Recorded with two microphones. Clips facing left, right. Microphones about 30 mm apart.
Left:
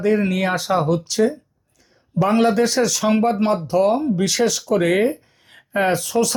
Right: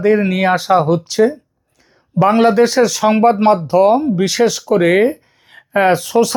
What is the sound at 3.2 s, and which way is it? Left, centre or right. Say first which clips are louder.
Speech: right 7 dB; right.